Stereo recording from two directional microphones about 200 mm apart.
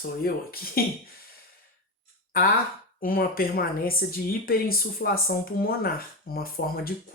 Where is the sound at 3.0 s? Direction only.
45° left (ahead or behind).